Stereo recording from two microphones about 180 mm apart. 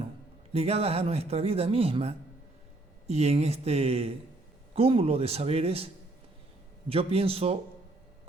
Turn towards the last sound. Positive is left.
turn(degrees=-35)  # may be behind; listen again after turning